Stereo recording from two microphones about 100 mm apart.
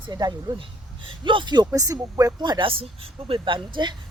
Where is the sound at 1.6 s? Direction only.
35° right (ahead or behind).